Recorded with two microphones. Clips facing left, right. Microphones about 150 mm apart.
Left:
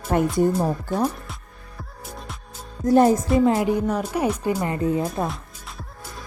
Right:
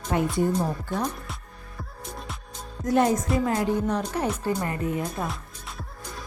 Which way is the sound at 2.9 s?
35° left (ahead or behind).